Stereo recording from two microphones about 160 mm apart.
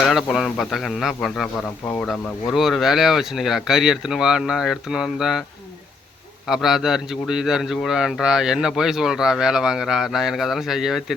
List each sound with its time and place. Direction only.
0.0 s a man's voice: centre (ahead or behind)
6.5 s a man's voice: centre (ahead or behind)